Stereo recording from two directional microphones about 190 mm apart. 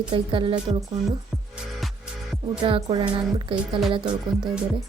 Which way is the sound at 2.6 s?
25° right (ahead or behind).